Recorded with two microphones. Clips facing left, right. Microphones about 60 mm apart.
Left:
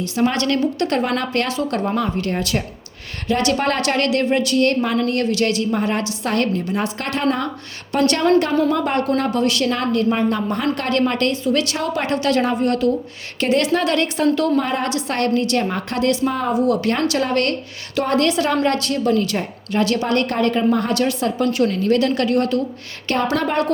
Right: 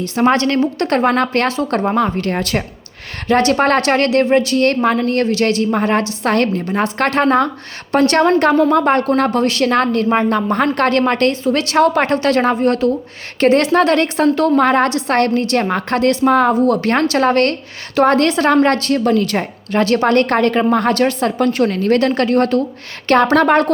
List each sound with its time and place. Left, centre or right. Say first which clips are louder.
0.0 s a woman's voice: right 5 dB; right
0.3 s a woman's voice: right 3 dB; right
4.5 s a woman's voice: right 3 dB; right
11.4 s a woman's voice: right 3 dB; right
11.8 s a woman's voice: right 8 dB; right
14.5 s a woman's voice: right 7 dB; right
16.6 s a woman's voice: right 4 dB; right
19.0 s a woman's voice: right 3 dB; right
20.9 s a woman's voice: right 4 dB; right
23.0 s a woman's voice: right 8 dB; right